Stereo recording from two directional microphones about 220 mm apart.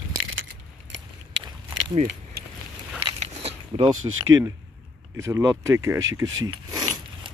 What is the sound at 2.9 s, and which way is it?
Biting, 25° right (ahead or behind).